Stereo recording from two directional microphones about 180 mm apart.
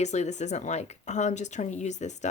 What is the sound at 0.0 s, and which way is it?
Speech, 40° left (ahead or behind).